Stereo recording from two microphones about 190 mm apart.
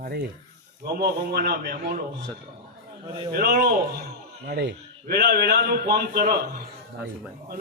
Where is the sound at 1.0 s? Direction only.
55° right (ahead or behind).